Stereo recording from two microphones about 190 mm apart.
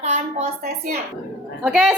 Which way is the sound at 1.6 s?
Centre (ahead or behind).